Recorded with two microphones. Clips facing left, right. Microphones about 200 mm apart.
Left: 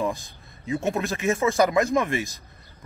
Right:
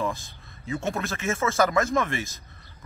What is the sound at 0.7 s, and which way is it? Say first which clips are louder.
A man's voice: left 4 dB; 15° left (ahead or behind).